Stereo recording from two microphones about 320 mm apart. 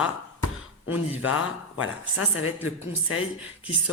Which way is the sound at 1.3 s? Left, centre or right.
Left.